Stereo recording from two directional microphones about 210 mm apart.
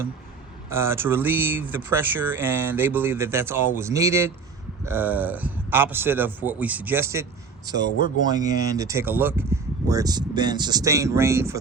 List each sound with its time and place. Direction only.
0.7 s speech: 10° right (ahead or behind)
7.9 s speech: 40° left (ahead or behind)
8.3 s speech: 15° right (ahead or behind)